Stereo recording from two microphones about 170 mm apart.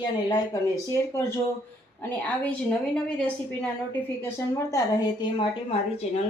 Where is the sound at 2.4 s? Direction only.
5° left (ahead or behind); by 5.5 s 25° left (ahead or behind).